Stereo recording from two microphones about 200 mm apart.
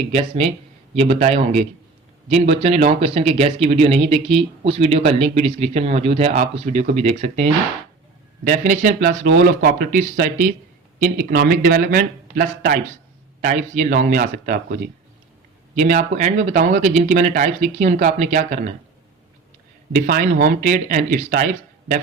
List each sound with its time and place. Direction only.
0.1 s speech: 30° right (ahead or behind)
15.7 s speech: 35° right (ahead or behind)
19.9 s speech: 40° right (ahead or behind)